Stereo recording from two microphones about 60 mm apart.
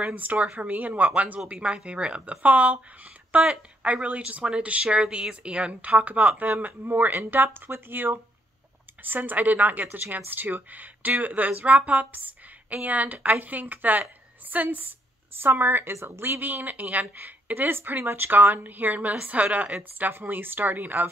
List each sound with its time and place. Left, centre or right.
0.0 s a woman's voice: right
9.8 s a woman's voice: right
20.1 s a woman's voice: right